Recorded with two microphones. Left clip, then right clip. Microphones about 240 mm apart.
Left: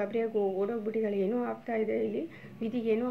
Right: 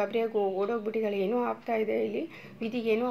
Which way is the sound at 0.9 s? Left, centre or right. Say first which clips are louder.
Right 1 dB; centre.